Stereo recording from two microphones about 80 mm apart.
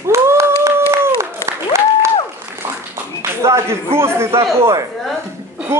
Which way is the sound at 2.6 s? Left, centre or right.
Right.